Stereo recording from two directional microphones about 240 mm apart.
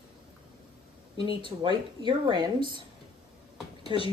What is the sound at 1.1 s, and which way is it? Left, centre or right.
Speech, centre.